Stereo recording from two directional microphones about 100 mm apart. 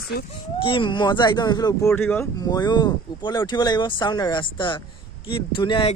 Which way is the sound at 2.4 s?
40° left (ahead or behind).